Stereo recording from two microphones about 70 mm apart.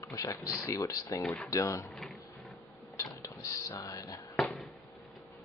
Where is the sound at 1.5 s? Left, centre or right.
Left.